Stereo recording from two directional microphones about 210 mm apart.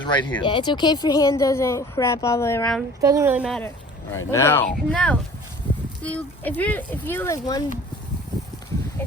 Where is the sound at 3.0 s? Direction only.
15° right (ahead or behind).